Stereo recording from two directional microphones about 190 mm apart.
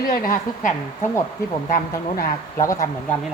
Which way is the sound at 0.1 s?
50° left (ahead or behind).